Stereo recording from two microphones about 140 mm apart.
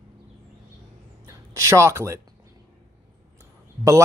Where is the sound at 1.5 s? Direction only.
20° right (ahead or behind).